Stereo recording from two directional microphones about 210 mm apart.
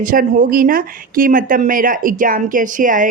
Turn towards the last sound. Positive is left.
turn(degrees=-40)  # may be behind; listen again after turning